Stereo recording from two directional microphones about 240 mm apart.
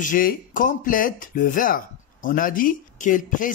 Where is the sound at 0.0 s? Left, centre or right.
Left.